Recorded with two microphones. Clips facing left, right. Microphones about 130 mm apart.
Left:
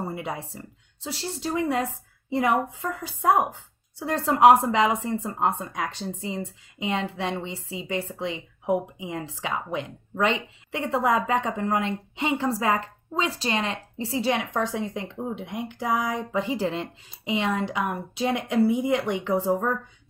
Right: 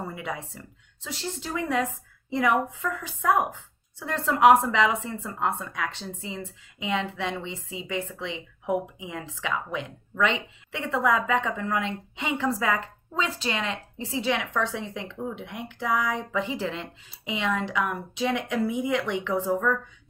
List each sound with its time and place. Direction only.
0.0 s speech: 35° left (ahead or behind)